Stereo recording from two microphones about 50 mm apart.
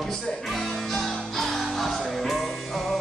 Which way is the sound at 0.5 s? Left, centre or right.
Centre.